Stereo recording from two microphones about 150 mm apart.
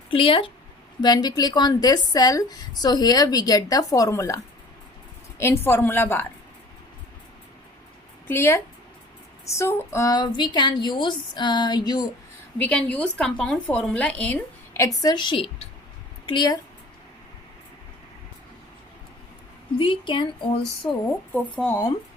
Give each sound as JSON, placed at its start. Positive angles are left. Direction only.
{"t": 0.1, "sound": "a woman's voice", "side_deg": 35}
{"t": 5.4, "sound": "a woman's voice", "side_deg": 15}
{"t": 8.3, "sound": "a woman's voice", "side_deg": 15}
{"t": 12.5, "sound": "a woman's voice", "side_deg": 10}
{"t": 15.0, "sound": "a woman's voice", "side_deg": 30}
{"t": 19.8, "sound": "a woman's voice", "side_deg": 35}
{"t": 21.3, "sound": "a woman's voice", "side_deg": 10}